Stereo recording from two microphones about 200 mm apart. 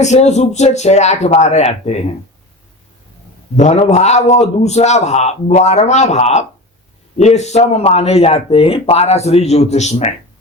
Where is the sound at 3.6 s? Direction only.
35° left (ahead or behind).